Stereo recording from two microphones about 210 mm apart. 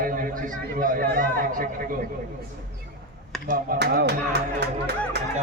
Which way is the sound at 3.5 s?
40° right (ahead or behind).